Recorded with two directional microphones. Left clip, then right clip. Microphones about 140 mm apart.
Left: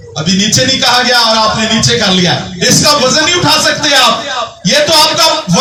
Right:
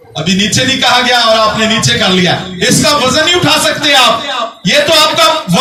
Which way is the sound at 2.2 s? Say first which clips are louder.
Even; 35° left (ahead or behind).